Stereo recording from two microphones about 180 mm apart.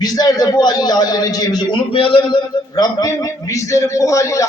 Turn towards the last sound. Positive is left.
turn(degrees=15)  # may be behind; listen again after turning